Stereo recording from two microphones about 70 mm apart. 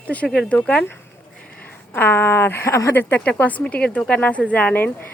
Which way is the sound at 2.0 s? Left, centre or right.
Left.